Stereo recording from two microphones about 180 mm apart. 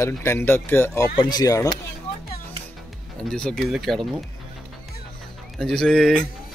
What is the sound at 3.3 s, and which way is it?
Speech, 5° left (ahead or behind).